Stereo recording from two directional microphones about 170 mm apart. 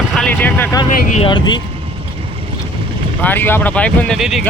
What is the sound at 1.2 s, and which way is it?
Speech, 25° left (ahead or behind).